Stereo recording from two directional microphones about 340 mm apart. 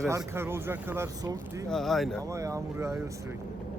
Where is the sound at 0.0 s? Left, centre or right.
Centre.